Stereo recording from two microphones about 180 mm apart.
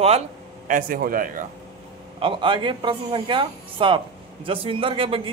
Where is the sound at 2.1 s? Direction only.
30° right (ahead or behind).